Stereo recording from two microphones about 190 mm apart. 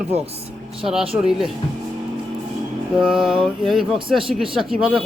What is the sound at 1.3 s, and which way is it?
Speech, centre (ahead or behind).